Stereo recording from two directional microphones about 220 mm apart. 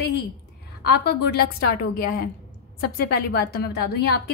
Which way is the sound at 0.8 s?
50° left (ahead or behind).